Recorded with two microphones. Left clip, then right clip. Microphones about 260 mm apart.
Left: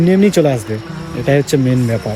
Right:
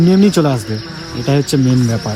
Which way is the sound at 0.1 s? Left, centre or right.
Centre.